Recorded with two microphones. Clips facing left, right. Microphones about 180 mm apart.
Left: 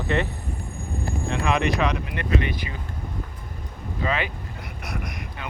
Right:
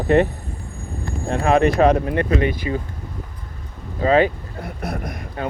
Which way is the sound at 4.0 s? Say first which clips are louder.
Right 11 dB; 35° right (ahead or behind).